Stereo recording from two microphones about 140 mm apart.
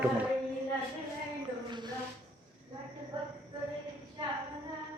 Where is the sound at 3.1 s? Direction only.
30° right (ahead or behind).